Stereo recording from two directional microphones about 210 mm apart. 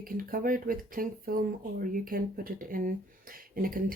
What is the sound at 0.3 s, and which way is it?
Speech, 40° right (ahead or behind).